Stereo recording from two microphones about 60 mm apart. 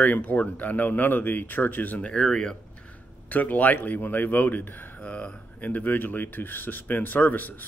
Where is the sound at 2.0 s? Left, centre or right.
Centre.